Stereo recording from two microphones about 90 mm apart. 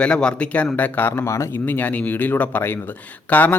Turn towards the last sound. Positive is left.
turn(degrees=20)  # may be behind; listen again after turning